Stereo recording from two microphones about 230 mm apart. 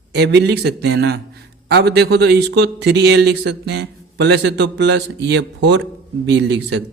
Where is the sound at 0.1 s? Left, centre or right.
Right.